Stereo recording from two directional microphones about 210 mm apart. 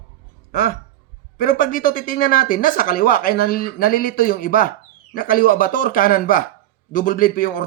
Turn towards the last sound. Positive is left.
turn(degrees=40)  # may be behind; listen again after turning